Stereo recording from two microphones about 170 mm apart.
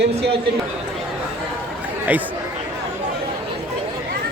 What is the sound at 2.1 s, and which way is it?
Speech, 10° right (ahead or behind).